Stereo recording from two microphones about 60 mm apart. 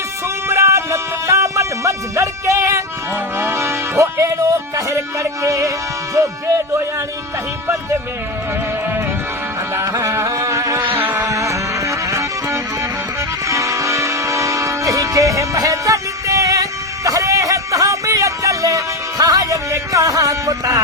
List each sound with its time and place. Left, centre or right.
0.4 s music: right
3.3 s music: right
3.9 s speech: right
10.2 s a sound: right
10.8 s vehicle: right
11.3 s music: right
13.5 s music: right